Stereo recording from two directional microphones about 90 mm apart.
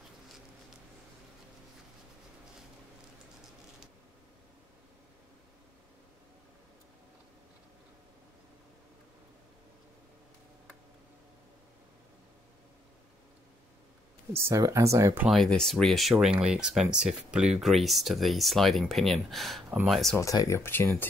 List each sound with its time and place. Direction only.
14.3 s speech: 30° right (ahead or behind)
15.2 s speech: 5° left (ahead or behind)
20.2 s speech: 35° left (ahead or behind)